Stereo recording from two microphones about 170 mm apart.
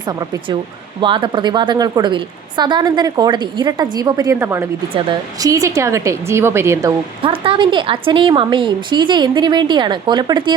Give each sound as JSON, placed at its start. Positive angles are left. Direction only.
{"t": 1.0, "sound": "a woman's voice", "side_deg": -30}
{"t": 7.2, "sound": "a woman's voice", "side_deg": -30}